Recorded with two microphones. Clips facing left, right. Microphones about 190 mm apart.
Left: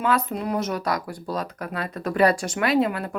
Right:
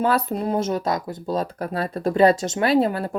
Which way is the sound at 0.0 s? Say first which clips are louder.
Right 2 dB; 35° right (ahead or behind).